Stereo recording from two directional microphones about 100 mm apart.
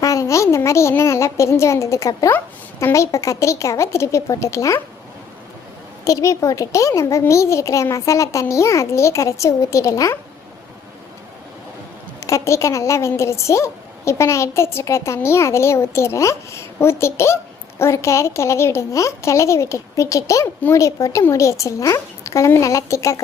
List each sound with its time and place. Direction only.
0.0 s a woman's voice: 30° left (ahead or behind)
6.1 s a child's voice: 35° left (ahead or behind)
12.2 s a woman's voice: 30° left (ahead or behind)